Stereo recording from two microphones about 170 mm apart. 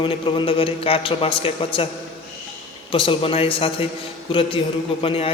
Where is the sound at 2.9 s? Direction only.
30° left (ahead or behind).